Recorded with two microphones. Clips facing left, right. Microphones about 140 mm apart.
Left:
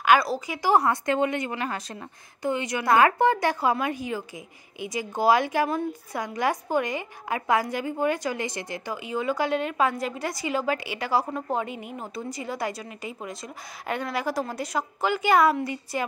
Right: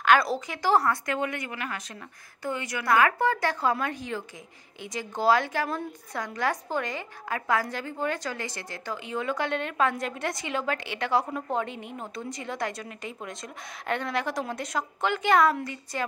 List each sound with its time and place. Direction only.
0.0 s a woman's voice: 5° left (ahead or behind)